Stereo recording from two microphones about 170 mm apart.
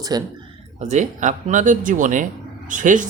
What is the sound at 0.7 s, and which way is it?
Speech, 40° right (ahead or behind).